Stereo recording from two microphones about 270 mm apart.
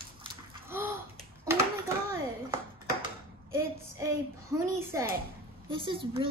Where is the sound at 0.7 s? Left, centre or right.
Centre.